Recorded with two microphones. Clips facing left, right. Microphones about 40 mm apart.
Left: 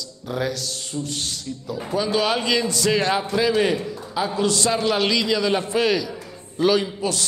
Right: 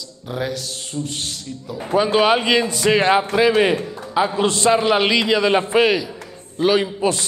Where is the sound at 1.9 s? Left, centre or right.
Right.